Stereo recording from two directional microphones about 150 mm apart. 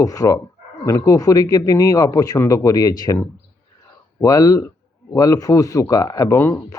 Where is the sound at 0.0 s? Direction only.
25° left (ahead or behind).